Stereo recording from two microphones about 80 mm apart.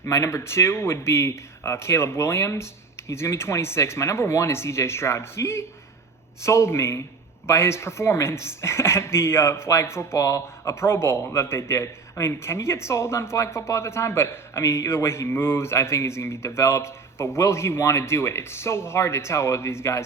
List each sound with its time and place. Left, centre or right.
0.0 s speech: left